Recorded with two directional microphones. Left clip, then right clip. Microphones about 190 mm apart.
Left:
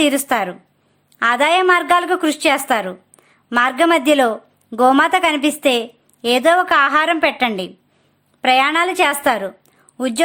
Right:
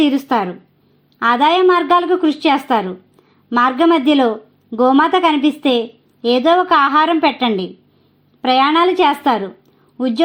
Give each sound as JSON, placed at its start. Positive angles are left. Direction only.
{"t": 0.0, "sound": "a woman's voice", "side_deg": 30}